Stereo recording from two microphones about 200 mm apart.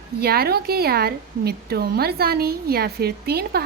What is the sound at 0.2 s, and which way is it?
A woman's voice, 50° right (ahead or behind).